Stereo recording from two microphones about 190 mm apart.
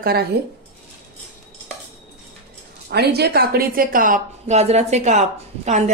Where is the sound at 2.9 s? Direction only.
55° right (ahead or behind).